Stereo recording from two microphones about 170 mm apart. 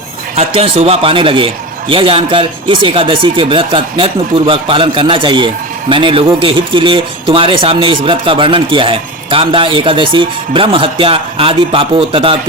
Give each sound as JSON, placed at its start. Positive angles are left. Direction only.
{"t": 0.3, "sound": "a man's voice", "side_deg": -35}